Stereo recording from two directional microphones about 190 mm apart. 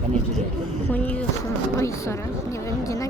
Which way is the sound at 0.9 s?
10° left (ahead or behind).